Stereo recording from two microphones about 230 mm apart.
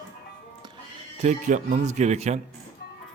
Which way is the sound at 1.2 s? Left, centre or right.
Right.